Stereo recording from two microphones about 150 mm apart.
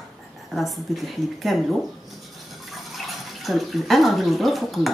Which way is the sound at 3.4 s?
Centre (ahead or behind).